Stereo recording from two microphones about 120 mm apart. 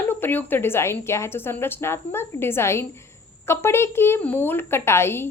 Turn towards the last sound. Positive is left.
turn(degrees=20)  # may be behind; listen again after turning